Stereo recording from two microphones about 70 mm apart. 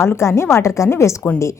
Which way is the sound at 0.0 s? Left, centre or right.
Left.